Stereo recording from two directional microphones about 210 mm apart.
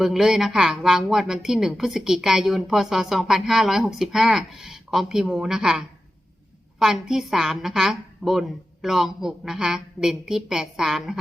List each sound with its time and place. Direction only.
0.0 s a woman's voice: centre (ahead or behind)